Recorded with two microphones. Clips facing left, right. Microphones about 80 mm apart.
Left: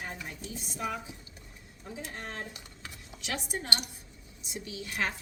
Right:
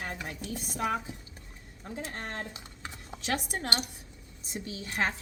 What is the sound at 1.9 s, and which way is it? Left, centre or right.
Speech, right.